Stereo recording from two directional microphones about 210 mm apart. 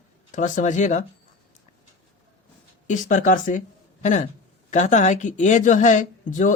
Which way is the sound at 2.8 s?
35° left (ahead or behind).